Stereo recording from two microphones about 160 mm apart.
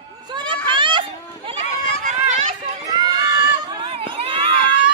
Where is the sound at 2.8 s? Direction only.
25° right (ahead or behind).